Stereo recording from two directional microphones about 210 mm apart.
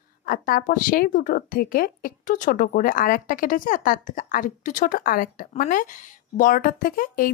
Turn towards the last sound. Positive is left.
turn(degrees=40)  # may be behind; listen again after turning